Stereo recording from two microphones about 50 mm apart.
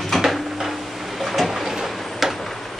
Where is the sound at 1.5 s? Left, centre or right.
Centre.